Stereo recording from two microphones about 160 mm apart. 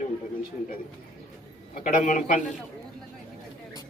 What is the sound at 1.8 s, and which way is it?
Speech, 50° left (ahead or behind).